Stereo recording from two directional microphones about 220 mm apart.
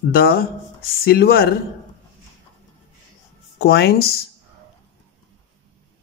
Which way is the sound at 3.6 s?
45° left (ahead or behind).